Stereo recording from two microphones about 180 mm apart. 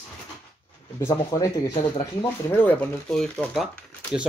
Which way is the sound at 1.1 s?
20° left (ahead or behind).